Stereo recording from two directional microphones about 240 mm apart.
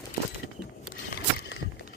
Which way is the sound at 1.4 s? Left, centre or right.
Left.